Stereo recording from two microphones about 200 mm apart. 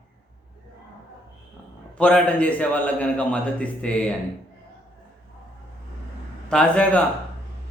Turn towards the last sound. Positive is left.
turn(degrees=5)  # may be behind; listen again after turning